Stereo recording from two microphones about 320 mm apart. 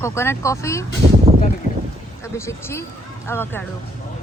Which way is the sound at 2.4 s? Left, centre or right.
Centre.